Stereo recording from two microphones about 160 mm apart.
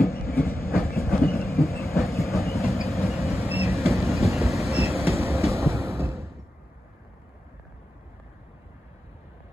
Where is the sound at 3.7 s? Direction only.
Centre (ahead or behind).